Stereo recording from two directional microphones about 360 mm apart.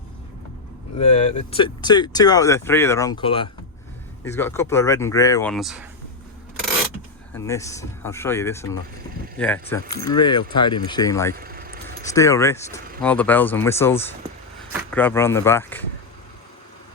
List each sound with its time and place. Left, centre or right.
0.9 s speech: centre
7.3 s speech: centre
11.3 s vehicle: right
12.0 s speech: centre
14.7 s vehicle: centre
15.0 s speech: centre